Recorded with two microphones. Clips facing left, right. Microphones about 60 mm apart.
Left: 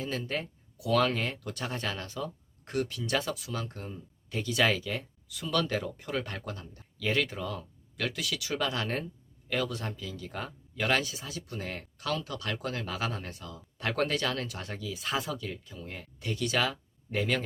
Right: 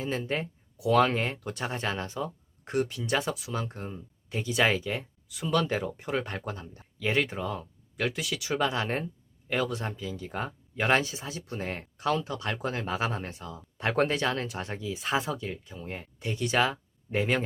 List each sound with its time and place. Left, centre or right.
0.0 s speech: right